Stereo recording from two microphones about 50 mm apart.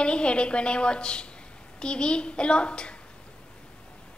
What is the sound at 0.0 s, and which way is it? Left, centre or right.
A woman's voice, left.